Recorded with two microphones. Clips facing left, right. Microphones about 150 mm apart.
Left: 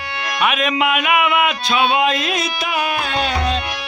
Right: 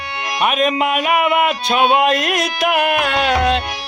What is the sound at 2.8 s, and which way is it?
Music, 75° right (ahead or behind).